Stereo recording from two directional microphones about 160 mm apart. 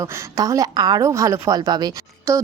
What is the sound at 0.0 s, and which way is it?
A woman's voice, 20° right (ahead or behind).